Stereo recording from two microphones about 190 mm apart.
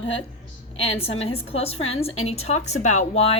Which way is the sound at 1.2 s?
30° left (ahead or behind).